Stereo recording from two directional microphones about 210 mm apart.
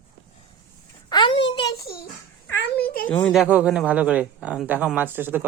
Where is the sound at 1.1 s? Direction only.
20° left (ahead or behind).